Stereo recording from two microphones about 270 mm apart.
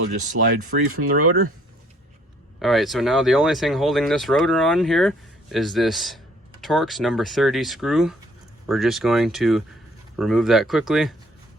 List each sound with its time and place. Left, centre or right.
0.1 s speech: right
0.9 s speech: right
2.6 s speech: centre